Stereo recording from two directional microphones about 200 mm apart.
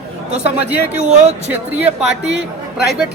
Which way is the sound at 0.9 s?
35° right (ahead or behind).